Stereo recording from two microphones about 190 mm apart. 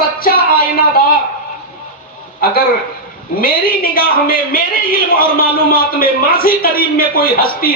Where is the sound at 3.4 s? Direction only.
50° left (ahead or behind).